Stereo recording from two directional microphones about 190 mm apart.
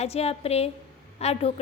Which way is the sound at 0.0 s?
35° left (ahead or behind).